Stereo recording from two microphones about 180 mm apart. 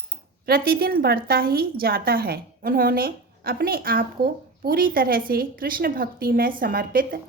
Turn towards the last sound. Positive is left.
turn(degrees=-55)  # may be behind; listen again after turning